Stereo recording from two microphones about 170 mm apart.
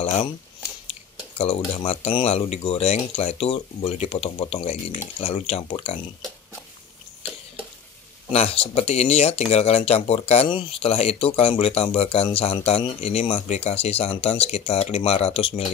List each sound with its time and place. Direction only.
0.0 s speech: 40° left (ahead or behind)
1.4 s speech: 35° left (ahead or behind)
8.3 s speech: 35° left (ahead or behind)